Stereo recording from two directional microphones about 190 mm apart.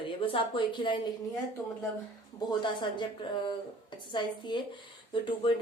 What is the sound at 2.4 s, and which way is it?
Speech, 25° left (ahead or behind).